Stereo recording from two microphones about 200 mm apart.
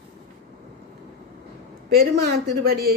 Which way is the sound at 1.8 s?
50° right (ahead or behind).